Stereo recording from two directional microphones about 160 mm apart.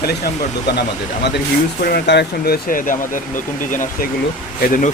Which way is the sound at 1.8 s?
85° left.